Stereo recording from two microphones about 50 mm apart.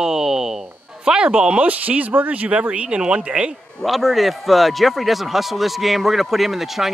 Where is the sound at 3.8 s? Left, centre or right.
Centre.